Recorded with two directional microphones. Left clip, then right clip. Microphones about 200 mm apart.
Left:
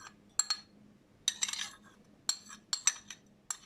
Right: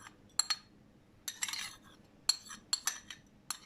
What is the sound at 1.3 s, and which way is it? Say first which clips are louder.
Cutlery: left 5 dB; centre (ahead or behind).